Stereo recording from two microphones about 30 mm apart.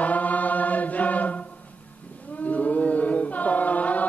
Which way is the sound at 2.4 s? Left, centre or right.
Left.